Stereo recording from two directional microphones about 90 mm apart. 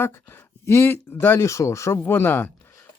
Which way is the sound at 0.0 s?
25° left (ahead or behind).